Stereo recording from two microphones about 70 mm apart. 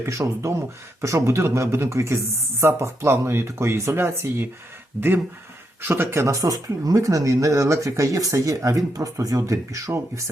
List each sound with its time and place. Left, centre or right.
0.0 s speech: right